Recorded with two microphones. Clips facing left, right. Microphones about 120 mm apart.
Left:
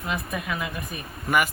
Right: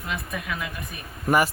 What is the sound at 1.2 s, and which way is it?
Speech, 35° right (ahead or behind).